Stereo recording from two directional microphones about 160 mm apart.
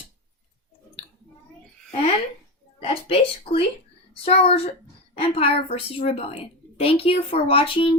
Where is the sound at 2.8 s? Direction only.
35° left (ahead or behind).